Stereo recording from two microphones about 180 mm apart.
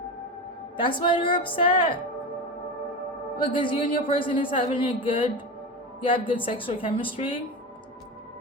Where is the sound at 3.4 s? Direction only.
25° left (ahead or behind).